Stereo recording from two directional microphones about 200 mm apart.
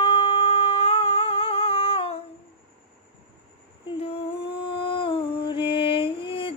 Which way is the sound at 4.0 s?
30° left (ahead or behind).